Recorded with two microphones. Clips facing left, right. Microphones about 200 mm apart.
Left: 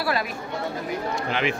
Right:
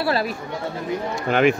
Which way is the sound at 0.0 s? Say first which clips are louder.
Right 4 dB; 30° right (ahead or behind).